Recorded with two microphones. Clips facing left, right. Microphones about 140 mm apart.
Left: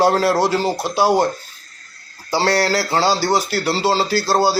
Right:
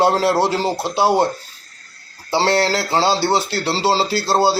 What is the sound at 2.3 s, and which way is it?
A man's voice, 25° right (ahead or behind).